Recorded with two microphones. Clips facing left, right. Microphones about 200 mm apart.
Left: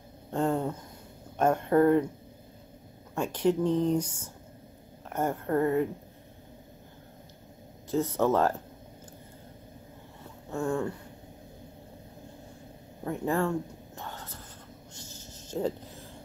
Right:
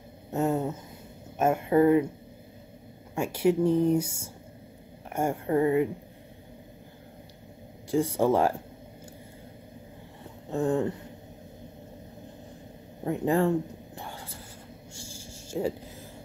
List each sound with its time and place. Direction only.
0.3 s speech: 5° right (ahead or behind)
3.2 s speech: 10° right (ahead or behind)
7.9 s speech: 10° right (ahead or behind)
10.5 s speech: 20° right (ahead or behind)
13.0 s a sound: 15° right (ahead or behind)